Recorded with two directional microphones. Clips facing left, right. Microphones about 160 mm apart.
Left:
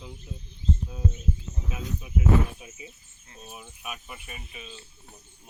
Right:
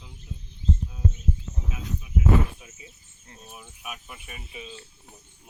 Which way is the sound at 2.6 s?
20° left (ahead or behind).